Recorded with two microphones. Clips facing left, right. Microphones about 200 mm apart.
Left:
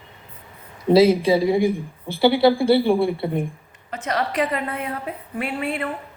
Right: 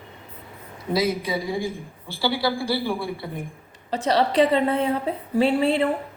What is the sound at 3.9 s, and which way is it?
A woman's voice, 30° right (ahead or behind).